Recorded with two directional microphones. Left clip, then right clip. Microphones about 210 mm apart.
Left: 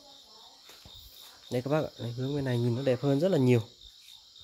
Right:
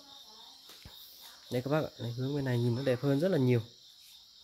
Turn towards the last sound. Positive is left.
turn(degrees=20)  # may be behind; listen again after turning